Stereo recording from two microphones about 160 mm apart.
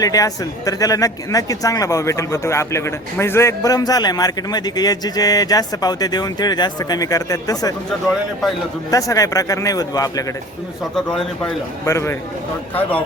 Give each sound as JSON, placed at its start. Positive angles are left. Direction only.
{"t": 0.0, "sound": "speech", "side_deg": 20}
{"t": 8.9, "sound": "speech", "side_deg": 20}
{"t": 10.9, "sound": "a man's voice", "side_deg": 5}
{"t": 11.9, "sound": "speech", "side_deg": 15}